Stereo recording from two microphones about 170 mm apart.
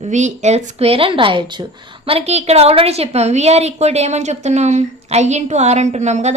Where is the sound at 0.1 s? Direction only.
45° right (ahead or behind).